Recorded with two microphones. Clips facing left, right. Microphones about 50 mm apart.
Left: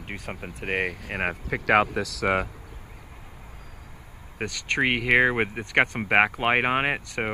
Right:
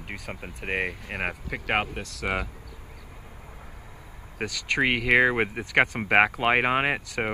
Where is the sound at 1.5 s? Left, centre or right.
Left.